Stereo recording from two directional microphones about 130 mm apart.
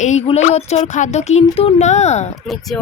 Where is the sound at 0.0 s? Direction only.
60° left (ahead or behind).